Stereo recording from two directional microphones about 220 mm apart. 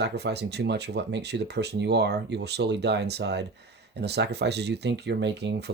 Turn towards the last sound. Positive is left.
turn(degrees=-50)  # may be behind; listen again after turning